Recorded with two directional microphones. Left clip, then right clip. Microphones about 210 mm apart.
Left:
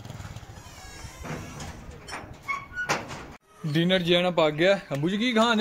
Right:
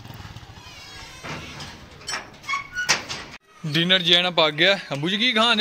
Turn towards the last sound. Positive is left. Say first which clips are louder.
# right 4 dB
turn(degrees=0)  # may be behind; listen again after turning